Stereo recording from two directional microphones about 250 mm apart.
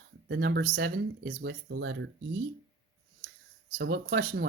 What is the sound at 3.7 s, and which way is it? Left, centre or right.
Speech, right.